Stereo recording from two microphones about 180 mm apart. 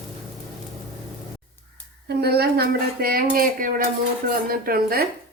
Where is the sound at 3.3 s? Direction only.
50° right (ahead or behind).